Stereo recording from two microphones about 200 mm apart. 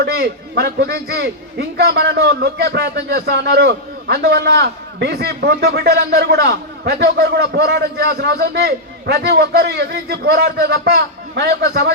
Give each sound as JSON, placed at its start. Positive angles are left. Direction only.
{"t": 0.0, "sound": "a man's voice", "side_deg": -55}